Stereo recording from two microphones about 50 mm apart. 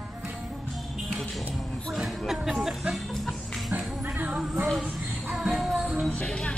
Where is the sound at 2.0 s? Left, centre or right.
Centre.